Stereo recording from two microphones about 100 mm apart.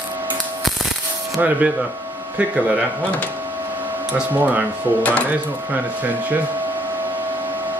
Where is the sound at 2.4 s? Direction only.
15° right (ahead or behind).